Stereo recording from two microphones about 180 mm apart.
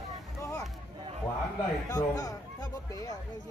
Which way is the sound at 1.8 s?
20° left (ahead or behind).